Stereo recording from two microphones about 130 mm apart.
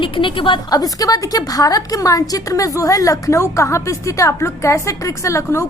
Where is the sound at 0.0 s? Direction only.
40° left (ahead or behind).